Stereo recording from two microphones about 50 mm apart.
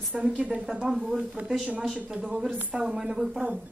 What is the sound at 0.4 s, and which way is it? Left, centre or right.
Speech, right.